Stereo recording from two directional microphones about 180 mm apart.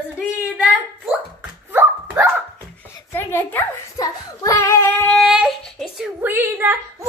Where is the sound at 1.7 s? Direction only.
10° right (ahead or behind).